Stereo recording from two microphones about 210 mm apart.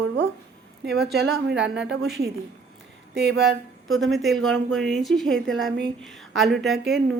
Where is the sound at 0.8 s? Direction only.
50° right (ahead or behind).